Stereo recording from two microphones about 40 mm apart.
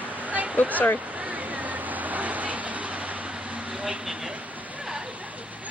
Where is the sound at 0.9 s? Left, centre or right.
Right.